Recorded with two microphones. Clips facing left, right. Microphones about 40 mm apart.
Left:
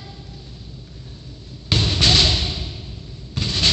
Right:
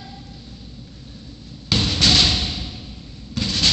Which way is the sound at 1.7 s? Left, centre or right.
Left.